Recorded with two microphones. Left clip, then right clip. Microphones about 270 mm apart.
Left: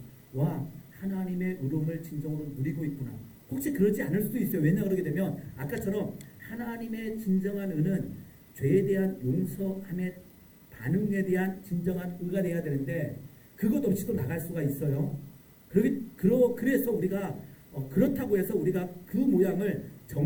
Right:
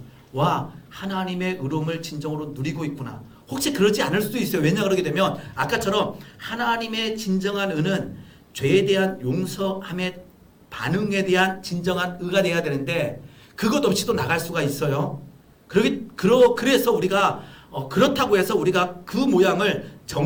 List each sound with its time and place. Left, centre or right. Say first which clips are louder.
0.3 s speech: right 13 dB; right
3.5 s speech: right 8 dB; right